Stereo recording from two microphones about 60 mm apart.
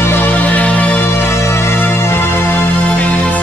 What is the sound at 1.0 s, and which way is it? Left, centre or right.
Music, left.